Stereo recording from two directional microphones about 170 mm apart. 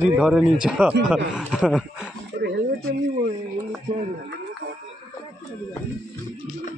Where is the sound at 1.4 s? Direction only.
5° right (ahead or behind).